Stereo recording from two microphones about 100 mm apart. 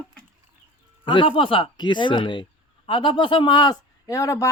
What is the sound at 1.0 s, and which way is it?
A man's voice, 55° left (ahead or behind).